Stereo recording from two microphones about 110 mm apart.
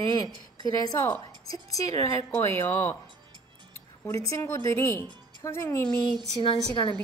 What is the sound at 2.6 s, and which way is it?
Speech, 20° left (ahead or behind).